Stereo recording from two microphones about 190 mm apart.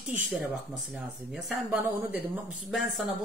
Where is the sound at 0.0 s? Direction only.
5° right (ahead or behind).